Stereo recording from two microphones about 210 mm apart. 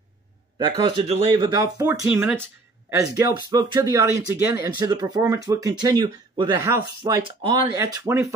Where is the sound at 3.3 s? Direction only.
20° right (ahead or behind).